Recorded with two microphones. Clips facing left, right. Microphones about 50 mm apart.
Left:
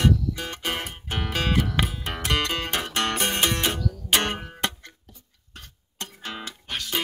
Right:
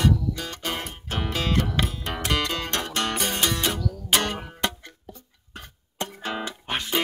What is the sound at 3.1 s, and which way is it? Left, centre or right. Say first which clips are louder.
Music: left 1 dB; left.